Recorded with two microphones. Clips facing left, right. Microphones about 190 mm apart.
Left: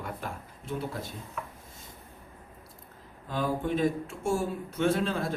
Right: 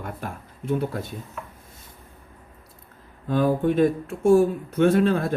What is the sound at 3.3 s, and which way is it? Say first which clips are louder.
A man's voice: right 9 dB; 60° right (ahead or behind).